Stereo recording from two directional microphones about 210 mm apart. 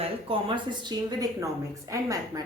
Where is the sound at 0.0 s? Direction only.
25° right (ahead or behind).